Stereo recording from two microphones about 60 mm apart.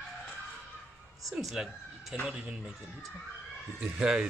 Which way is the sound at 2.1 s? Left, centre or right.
Centre.